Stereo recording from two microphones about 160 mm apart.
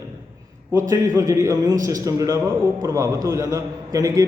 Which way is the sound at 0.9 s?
20° right (ahead or behind).